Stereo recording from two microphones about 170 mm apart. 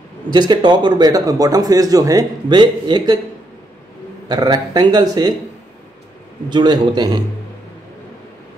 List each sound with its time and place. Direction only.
0.3 s speech: 25° right (ahead or behind)
4.3 s speech: 25° right (ahead or behind)
6.5 s speech: 25° right (ahead or behind)